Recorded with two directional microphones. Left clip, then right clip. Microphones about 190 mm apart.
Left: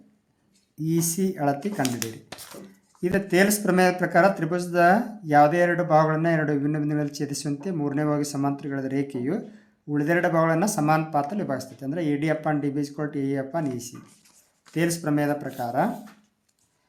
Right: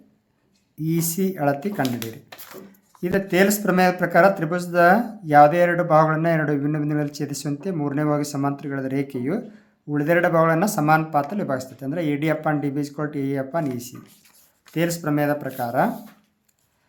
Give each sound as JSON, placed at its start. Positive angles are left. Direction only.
{"t": 0.8, "sound": "speech", "side_deg": -15}
{"t": 3.0, "sound": "speech", "side_deg": -10}